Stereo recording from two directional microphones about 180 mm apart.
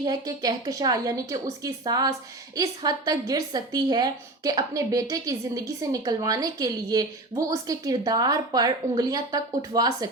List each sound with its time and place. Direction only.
0.0 s a woman's voice: 20° right (ahead or behind)